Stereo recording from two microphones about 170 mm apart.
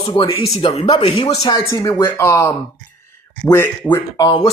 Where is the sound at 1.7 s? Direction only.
20° left (ahead or behind).